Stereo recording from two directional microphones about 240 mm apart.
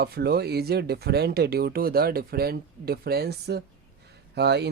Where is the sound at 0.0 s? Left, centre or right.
Right.